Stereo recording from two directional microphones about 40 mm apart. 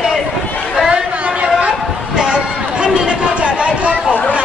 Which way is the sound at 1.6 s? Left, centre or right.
Right.